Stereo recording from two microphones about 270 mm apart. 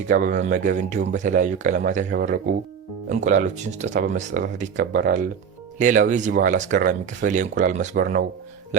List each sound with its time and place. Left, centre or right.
0.1 s speech: right